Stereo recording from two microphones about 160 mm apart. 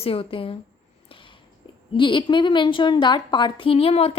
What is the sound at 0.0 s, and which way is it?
Speech, 35° left (ahead or behind).